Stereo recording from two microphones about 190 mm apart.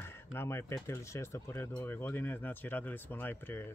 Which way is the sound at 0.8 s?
15° left (ahead or behind).